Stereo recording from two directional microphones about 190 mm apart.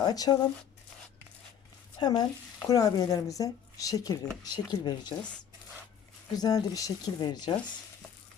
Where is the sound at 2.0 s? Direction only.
20° left (ahead or behind).